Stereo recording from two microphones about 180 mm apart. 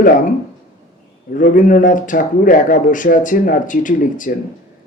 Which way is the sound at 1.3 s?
45° left (ahead or behind).